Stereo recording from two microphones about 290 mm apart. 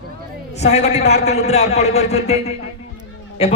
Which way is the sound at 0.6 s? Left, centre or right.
Left.